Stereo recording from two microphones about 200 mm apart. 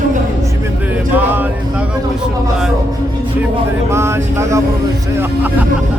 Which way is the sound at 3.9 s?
15° right (ahead or behind).